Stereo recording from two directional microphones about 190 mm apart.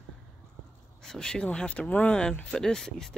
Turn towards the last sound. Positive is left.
turn(degrees=0)  # may be behind; listen again after turning